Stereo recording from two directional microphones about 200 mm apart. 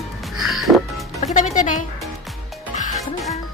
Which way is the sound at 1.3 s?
40° left (ahead or behind).